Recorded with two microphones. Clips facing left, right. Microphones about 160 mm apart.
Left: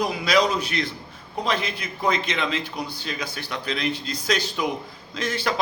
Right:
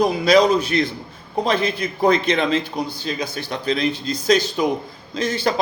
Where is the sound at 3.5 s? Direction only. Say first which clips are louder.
Right 6 dB; 40° right (ahead or behind).